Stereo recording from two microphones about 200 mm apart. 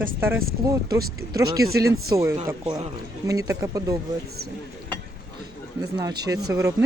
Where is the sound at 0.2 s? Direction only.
10° right (ahead or behind).